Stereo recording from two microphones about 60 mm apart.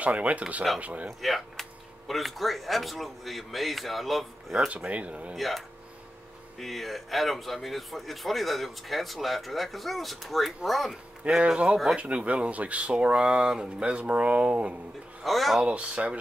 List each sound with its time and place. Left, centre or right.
0.0 s speech: right
1.2 s speech: centre
4.6 s speech: centre
5.3 s speech: centre
6.6 s speech: centre
11.2 s speech: centre
15.2 s speech: centre
15.6 s speech: right